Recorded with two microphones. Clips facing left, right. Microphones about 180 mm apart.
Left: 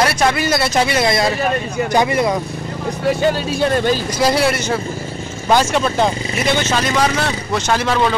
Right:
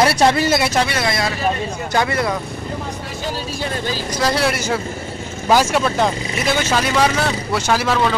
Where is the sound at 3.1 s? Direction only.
65° left (ahead or behind).